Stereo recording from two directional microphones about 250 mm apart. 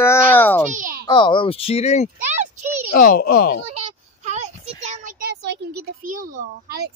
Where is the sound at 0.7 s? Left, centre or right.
Right.